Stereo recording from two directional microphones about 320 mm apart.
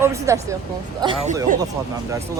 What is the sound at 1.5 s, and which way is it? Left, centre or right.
Speech, right.